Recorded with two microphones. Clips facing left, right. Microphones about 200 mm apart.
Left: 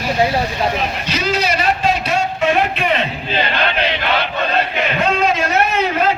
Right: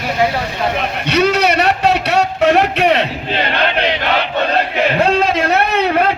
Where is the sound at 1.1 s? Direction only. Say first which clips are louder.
Right 7 dB; 65° right (ahead or behind).